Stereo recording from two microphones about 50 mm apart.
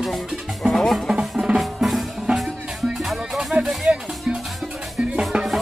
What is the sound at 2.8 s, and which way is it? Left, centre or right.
Music, centre.